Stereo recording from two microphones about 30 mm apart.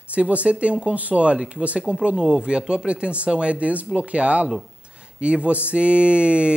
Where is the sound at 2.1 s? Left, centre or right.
Right.